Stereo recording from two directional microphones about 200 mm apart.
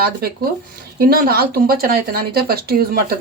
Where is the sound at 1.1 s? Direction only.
50° right (ahead or behind).